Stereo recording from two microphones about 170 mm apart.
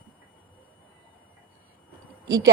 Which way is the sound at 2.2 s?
20° right (ahead or behind).